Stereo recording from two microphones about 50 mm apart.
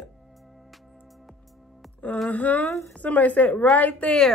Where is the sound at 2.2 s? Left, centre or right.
Left.